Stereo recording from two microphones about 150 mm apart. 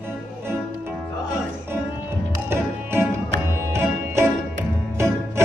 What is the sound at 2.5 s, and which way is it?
Music, 15° right (ahead or behind).